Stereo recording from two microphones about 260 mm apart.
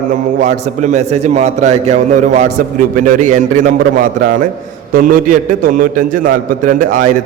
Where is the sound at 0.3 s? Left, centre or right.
Right.